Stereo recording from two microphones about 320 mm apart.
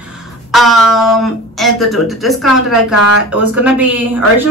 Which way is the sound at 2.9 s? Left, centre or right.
Left.